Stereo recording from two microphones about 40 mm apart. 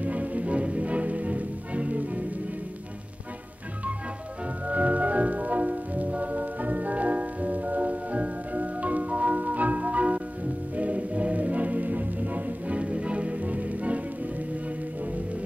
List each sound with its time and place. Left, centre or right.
0.0 s music: right
4.6 s music: right